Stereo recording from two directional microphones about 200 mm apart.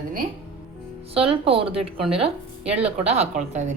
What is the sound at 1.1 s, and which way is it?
A woman's voice, 30° right (ahead or behind).